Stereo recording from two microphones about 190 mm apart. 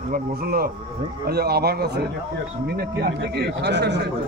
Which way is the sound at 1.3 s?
55° right (ahead or behind).